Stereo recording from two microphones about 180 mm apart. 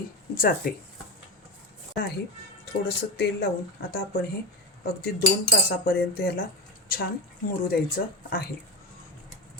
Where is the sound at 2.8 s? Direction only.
65° left (ahead or behind).